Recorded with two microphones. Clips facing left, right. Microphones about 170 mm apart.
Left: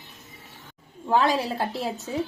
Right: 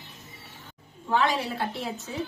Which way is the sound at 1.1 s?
35° left (ahead or behind).